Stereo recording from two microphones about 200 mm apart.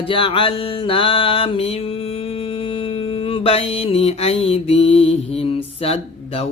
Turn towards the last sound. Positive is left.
turn(degrees=30)  # may be behind; listen again after turning